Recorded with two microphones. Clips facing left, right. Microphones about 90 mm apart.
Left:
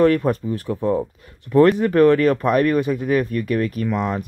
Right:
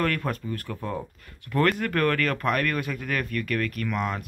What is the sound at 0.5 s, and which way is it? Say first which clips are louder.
Speech: left 11 dB; 20° left (ahead or behind).